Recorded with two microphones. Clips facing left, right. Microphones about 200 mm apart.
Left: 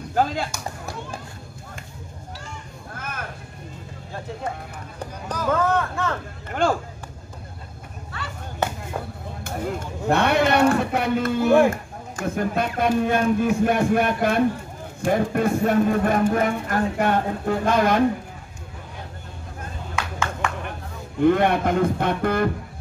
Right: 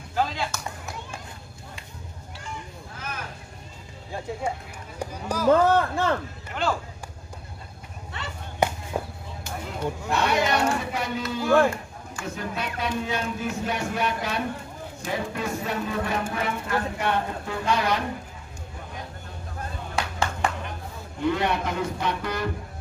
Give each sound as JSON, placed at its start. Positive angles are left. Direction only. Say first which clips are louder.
{"t": 0.1, "sound": "chop", "louder": "left 4 dB", "side_deg": 45}
{"t": 2.9, "sound": "a sound", "louder": "left 3 dB", "side_deg": 55}
{"t": 4.9, "sound": "speech", "louder": "right 2 dB", "side_deg": -10}
{"t": 5.5, "sound": "speech", "louder": "right 3 dB", "side_deg": -30}
{"t": 6.6, "sound": "speech", "louder": "left 5 dB", "side_deg": 50}
{"t": 8.1, "sound": "chop", "louder": "left 1 dB", "side_deg": -20}
{"t": 8.6, "sound": "a sound", "louder": "right 2 dB", "side_deg": -10}
{"t": 9.4, "sound": "speech", "louder": "left 3 dB", "side_deg": 50}
{"t": 11.4, "sound": "speech", "louder": "left 3 dB", "side_deg": 15}
{"t": 11.7, "sound": "speech", "louder": "left 3 dB", "side_deg": 50}
{"t": 20.4, "sound": "a sound", "louder": "right 2 dB", "side_deg": -35}
{"t": 21.2, "sound": "speech", "louder": "left 7 dB", "side_deg": 55}